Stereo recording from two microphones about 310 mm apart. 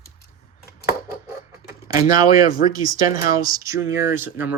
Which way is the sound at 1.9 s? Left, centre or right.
Centre.